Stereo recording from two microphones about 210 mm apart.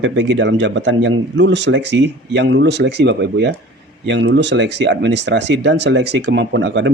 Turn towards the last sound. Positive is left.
turn(degrees=-60)  # may be behind; listen again after turning